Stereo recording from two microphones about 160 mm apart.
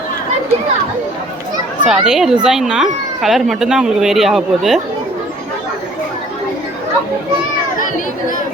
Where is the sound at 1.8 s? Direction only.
Centre (ahead or behind).